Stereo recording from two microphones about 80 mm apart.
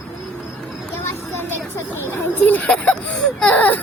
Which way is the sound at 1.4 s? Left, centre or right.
Left.